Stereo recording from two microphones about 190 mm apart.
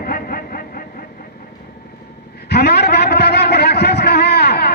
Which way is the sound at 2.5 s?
60° left (ahead or behind).